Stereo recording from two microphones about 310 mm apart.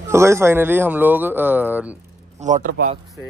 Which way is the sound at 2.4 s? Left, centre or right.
Right.